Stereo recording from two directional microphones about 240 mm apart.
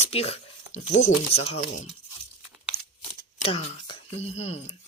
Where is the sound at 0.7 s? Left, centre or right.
Left.